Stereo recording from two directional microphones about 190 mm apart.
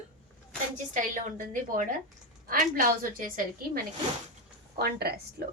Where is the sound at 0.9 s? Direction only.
45° right (ahead or behind).